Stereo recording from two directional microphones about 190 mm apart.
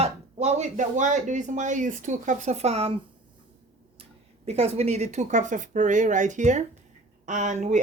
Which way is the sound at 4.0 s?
35° right (ahead or behind).